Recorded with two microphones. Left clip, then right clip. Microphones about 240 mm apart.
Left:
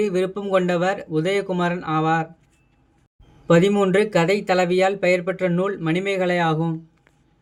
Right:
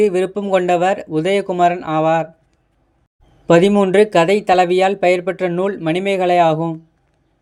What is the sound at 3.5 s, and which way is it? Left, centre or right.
Speech, right.